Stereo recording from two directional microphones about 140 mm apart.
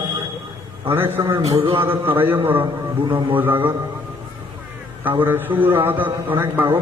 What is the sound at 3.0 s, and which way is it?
Speech, 35° right (ahead or behind).